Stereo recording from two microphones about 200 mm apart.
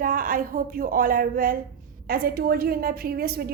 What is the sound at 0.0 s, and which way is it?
A woman's voice, 45° right (ahead or behind).